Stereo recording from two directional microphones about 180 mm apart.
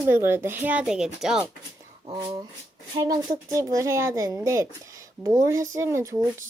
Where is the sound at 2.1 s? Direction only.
20° right (ahead or behind).